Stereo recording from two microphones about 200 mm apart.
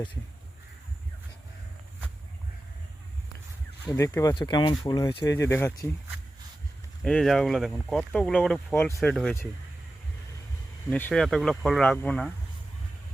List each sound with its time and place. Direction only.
3.8 s speech: 15° left (ahead or behind)
7.0 s speech: 5° left (ahead or behind)
10.8 s speech: 10° left (ahead or behind)